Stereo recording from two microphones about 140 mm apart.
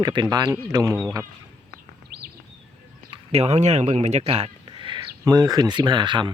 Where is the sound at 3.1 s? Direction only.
50° right (ahead or behind).